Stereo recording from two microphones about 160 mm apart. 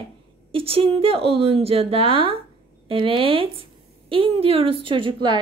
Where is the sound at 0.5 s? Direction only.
35° right (ahead or behind).